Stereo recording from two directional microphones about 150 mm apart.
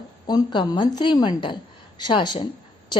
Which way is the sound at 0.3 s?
30° left (ahead or behind).